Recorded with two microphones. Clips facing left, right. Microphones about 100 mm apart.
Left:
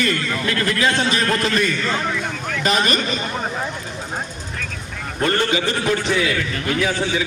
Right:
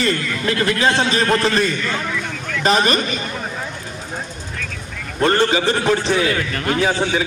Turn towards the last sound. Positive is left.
turn(degrees=-35)  # may be behind; listen again after turning